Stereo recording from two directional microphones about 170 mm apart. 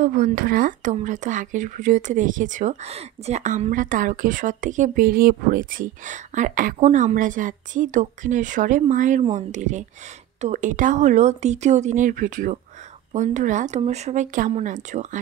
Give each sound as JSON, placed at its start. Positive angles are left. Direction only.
{"t": 0.0, "sound": "speech", "side_deg": -50}